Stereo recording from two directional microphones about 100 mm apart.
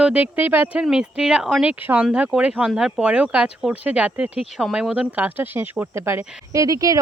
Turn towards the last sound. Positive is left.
turn(degrees=-35)  # may be behind; listen again after turning